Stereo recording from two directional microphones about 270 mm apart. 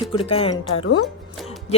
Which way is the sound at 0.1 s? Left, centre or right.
Centre.